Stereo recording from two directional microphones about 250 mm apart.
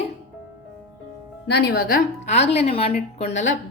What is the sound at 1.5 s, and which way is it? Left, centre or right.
A woman's voice, left.